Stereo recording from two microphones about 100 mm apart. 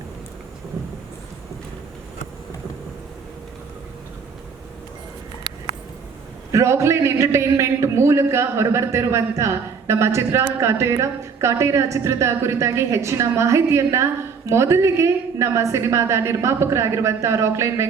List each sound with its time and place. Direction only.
6.5 s a woman's voice: 30° right (ahead or behind)